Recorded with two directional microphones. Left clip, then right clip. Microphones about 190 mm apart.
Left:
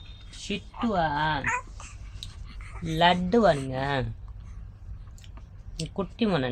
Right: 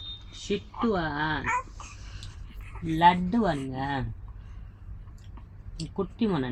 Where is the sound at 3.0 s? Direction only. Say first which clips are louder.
Left 1 dB; 45° left (ahead or behind).